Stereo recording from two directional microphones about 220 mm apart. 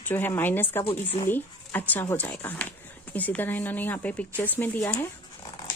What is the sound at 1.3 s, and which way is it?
A woman's voice, 10° left (ahead or behind).